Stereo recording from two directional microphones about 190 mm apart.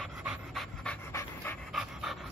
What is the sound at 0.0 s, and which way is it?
Pant, centre (ahead or behind).